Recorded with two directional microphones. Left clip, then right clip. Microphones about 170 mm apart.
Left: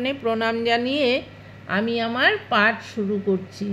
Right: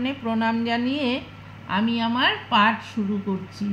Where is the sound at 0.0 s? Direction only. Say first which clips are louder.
Left 3 dB; 50° left (ahead or behind).